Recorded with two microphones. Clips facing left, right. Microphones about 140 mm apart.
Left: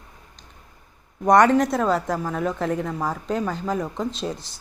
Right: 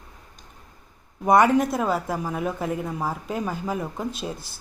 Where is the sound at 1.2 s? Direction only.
5° right (ahead or behind).